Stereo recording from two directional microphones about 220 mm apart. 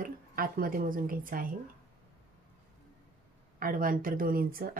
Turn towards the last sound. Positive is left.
turn(degrees=-40)  # may be behind; listen again after turning